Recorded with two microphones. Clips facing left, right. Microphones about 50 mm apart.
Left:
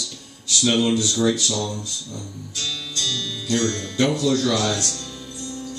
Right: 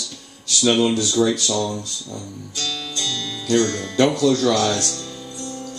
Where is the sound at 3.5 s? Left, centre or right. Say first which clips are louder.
Right 4 dB; centre.